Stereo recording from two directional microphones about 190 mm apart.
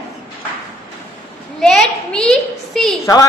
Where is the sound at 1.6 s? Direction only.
Centre (ahead or behind).